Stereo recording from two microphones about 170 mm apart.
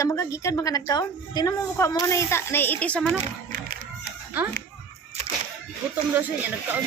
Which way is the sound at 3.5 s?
60° right (ahead or behind).